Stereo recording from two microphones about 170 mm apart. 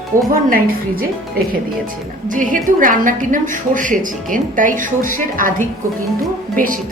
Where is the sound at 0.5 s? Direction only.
60° right (ahead or behind).